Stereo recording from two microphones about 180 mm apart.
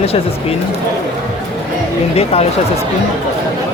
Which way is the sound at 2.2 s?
35° left (ahead or behind).